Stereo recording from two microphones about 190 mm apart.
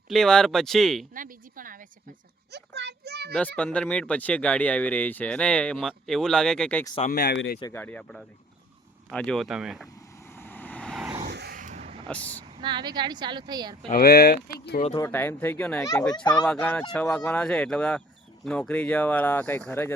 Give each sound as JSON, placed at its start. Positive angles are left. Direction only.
{"t": 0.1, "sound": "speech", "side_deg": 5}
{"t": 1.1, "sound": "a sound", "side_deg": -45}
{"t": 2.5, "sound": "children playing", "side_deg": -65}
{"t": 3.6, "sound": "speech", "side_deg": 5}
{"t": 7.1, "sound": "speech", "side_deg": 60}
{"t": 7.7, "sound": "speech", "side_deg": 10}
{"t": 10.2, "sound": "vehicle", "side_deg": 10}
{"t": 11.3, "sound": "vehicle", "side_deg": -65}
{"t": 11.5, "sound": "vehicle", "side_deg": -40}
{"t": 12.0, "sound": "speech", "side_deg": 5}
{"t": 12.5, "sound": "a woman's voice", "side_deg": -25}
{"t": 13.9, "sound": "speech", "side_deg": 55}
{"t": 14.9, "sound": "speech", "side_deg": 15}